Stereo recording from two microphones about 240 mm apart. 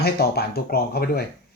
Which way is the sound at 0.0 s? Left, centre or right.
Left.